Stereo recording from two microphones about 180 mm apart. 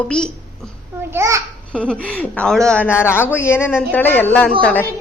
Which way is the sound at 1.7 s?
5° left (ahead or behind).